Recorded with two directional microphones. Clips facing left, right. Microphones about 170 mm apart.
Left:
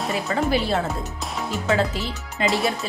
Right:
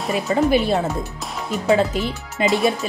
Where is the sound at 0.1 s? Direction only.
20° right (ahead or behind).